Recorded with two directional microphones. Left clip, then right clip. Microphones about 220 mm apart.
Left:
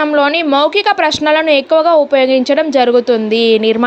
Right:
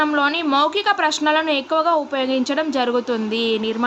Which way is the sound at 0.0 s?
25° left (ahead or behind).